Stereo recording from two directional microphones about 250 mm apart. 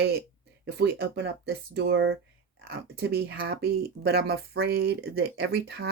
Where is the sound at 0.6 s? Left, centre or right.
Right.